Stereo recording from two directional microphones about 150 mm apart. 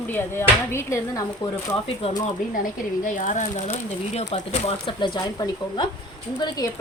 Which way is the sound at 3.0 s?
60° left (ahead or behind).